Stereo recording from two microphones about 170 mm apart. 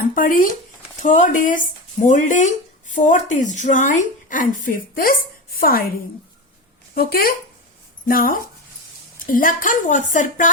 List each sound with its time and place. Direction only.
0.1 s speech: 55° left (ahead or behind)
6.9 s speech: 60° left (ahead or behind)